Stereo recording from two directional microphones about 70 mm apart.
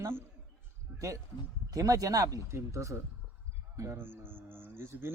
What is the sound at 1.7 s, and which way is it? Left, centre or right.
A man's voice, right.